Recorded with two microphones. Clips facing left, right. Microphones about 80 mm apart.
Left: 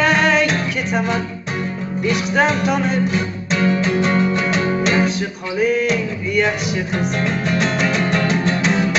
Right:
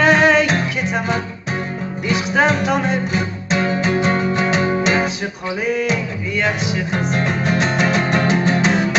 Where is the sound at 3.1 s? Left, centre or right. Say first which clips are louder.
Even; right.